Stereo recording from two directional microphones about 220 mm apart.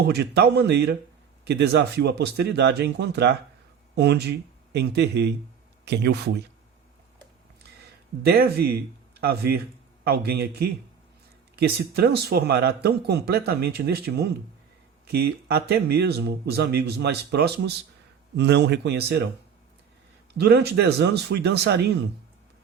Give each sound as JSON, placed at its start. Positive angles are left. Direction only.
{"t": 0.0, "sound": "a man's voice", "side_deg": -50}
{"t": 8.2, "sound": "a man's voice", "side_deg": -45}
{"t": 20.3, "sound": "a man's voice", "side_deg": -50}